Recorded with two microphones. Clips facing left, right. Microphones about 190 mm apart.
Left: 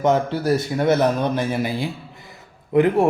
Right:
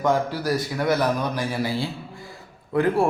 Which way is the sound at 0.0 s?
25° left (ahead or behind).